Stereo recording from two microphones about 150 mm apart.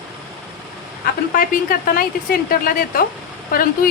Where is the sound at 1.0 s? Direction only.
70° left (ahead or behind).